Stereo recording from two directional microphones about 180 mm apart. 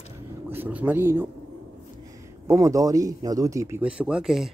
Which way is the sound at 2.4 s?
15° right (ahead or behind).